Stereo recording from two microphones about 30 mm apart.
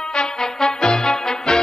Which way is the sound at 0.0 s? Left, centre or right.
Left.